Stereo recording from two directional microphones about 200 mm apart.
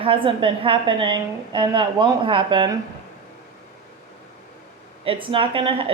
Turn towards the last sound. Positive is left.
turn(degrees=-25)  # may be behind; listen again after turning